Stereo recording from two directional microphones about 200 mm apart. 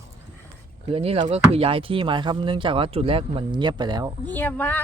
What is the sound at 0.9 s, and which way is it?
Speech, 30° right (ahead or behind).